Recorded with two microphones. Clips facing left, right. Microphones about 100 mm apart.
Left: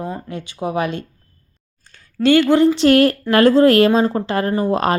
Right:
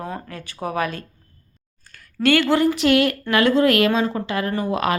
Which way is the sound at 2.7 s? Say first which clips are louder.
Left 5 dB; 40° left (ahead or behind).